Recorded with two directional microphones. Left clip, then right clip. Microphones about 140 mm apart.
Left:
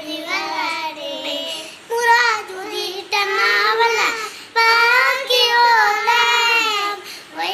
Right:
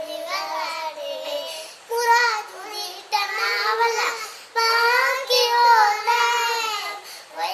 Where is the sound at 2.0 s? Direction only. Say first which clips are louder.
Left 4 dB; 5° left (ahead or behind).